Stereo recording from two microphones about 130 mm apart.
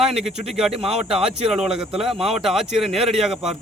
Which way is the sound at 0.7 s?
50° right (ahead or behind).